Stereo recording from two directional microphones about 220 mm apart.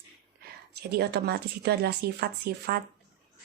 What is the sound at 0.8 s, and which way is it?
A woman's voice, 50° right (ahead or behind).